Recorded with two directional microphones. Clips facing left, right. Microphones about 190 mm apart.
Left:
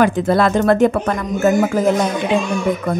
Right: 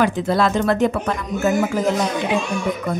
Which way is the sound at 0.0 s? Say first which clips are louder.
Left 4 dB; 50° left (ahead or behind).